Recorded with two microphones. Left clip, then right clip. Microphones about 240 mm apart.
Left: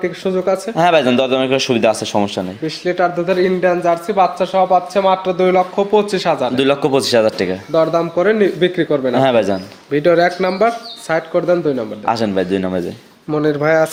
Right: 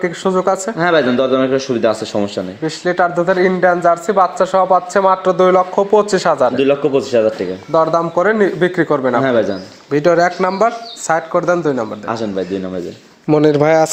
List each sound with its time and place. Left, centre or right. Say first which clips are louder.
0.0 s speech: right 2 dB; centre
0.8 s speech: left 2 dB; left
2.1 s speech: left 1 dB; centre
2.6 s speech: right 2 dB; centre
6.6 s speech: right 1 dB; left
7.7 s speech: right 2 dB; centre
9.2 s speech: left 1 dB; left
9.9 s speech: even; centre
12.0 s speech: left 3 dB; left
13.3 s speech: right 3 dB; right